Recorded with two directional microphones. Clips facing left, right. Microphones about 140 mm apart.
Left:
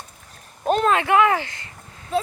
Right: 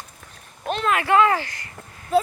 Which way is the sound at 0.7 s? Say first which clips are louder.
Left 5 dB; 40° left (ahead or behind).